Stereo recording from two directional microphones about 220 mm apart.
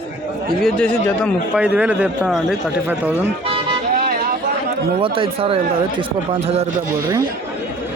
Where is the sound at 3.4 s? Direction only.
25° right (ahead or behind).